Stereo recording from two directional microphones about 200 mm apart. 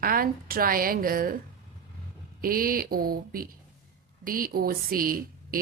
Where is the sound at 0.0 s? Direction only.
45° right (ahead or behind).